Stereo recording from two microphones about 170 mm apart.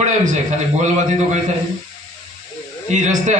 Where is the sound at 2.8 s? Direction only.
45° right (ahead or behind).